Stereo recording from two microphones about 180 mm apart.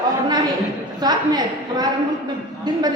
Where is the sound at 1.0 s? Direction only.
20° right (ahead or behind).